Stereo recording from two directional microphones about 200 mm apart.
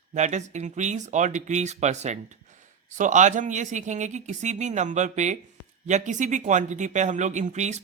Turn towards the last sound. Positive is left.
turn(degrees=-35)  # may be behind; listen again after turning